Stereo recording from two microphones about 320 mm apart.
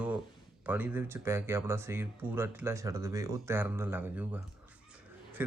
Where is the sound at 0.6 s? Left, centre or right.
Centre.